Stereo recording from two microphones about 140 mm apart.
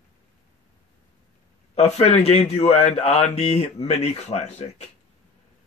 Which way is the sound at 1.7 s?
50° left (ahead or behind).